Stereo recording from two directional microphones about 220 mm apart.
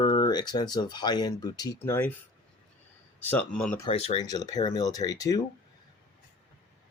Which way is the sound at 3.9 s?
25° left (ahead or behind).